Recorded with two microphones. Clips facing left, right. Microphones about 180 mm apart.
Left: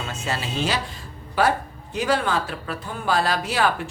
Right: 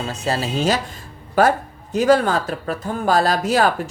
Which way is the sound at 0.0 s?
35° right (ahead or behind).